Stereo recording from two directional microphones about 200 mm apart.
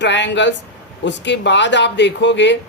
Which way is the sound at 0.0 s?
60° left (ahead or behind).